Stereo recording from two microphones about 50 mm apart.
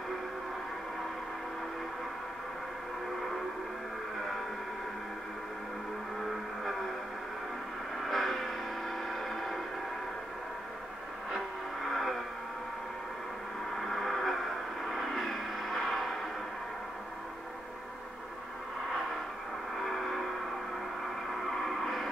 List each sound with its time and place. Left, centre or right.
8.0 s a sound: centre
11.3 s music: centre
13.7 s gong: centre
14.9 s a sound: centre
19.8 s music: centre
21.5 s music: centre